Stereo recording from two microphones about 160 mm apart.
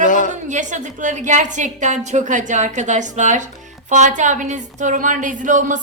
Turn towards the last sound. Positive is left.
turn(degrees=-55)  # may be behind; listen again after turning